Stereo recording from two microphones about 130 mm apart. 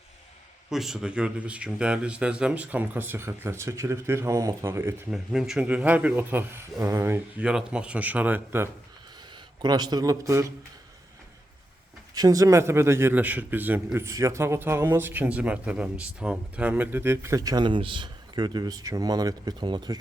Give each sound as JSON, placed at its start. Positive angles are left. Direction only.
{"t": 0.7, "sound": "speech", "side_deg": -5}
{"t": 5.1, "sound": "a man's voice", "side_deg": -5}
{"t": 7.4, "sound": "speech", "side_deg": -10}
{"t": 9.3, "sound": "speech", "side_deg": -30}
{"t": 12.1, "sound": "a man's voice", "side_deg": -30}